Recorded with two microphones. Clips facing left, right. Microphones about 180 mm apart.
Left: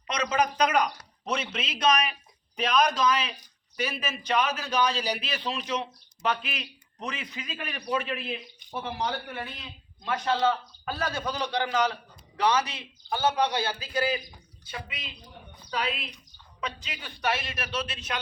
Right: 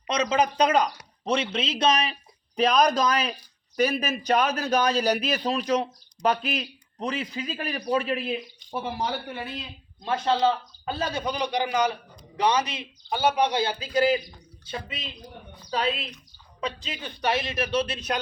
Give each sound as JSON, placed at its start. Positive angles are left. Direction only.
{"t": 0.1, "sound": "a man's voice", "side_deg": -30}
{"t": 8.8, "sound": "a man's voice", "side_deg": -10}
{"t": 10.0, "sound": "a man's voice", "side_deg": -25}
{"t": 15.7, "sound": "a man's voice", "side_deg": -25}